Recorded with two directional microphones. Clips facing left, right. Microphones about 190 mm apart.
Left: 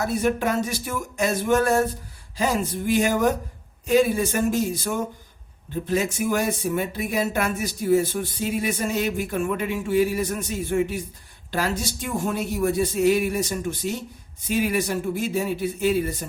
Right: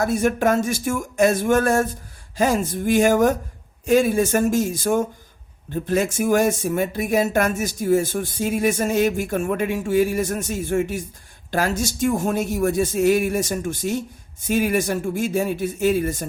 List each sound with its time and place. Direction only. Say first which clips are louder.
0.0 s speech: right 4 dB; 50° right (ahead or behind)